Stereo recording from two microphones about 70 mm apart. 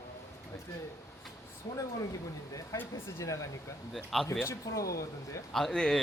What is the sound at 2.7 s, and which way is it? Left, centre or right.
Speech, left.